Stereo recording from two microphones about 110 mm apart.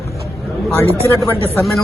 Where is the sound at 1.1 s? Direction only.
25° left (ahead or behind).